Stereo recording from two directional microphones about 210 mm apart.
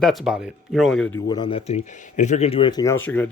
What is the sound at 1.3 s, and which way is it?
Speech, 20° left (ahead or behind).